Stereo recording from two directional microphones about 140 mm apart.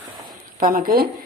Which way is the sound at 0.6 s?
85° right.